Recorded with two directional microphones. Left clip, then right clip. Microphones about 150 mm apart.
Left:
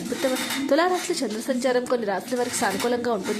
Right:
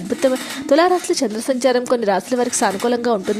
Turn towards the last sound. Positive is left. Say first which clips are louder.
# right 6 dB
turn(degrees=-40)  # may be behind; listen again after turning